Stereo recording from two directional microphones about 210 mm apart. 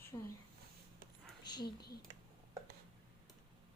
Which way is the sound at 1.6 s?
50° left (ahead or behind).